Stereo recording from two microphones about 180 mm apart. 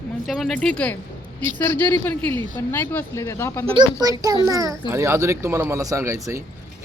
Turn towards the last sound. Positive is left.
turn(degrees=-15)  # may be behind; listen again after turning